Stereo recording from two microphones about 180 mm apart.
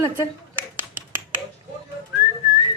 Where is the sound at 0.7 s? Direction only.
10° right (ahead or behind).